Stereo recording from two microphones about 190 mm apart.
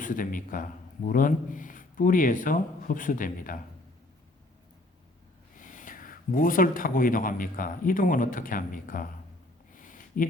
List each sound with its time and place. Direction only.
0.0 s speech: 45° left (ahead or behind)
5.5 s speech: 45° left (ahead or behind)
9.7 s a sound: 45° left (ahead or behind)